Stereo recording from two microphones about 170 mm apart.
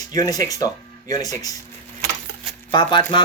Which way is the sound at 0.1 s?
20° left (ahead or behind).